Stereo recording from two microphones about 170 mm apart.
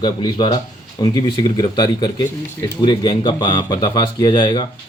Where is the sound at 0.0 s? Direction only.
25° left (ahead or behind).